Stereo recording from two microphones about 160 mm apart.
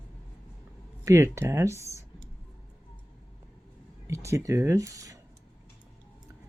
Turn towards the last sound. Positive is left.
turn(degrees=-20)  # may be behind; listen again after turning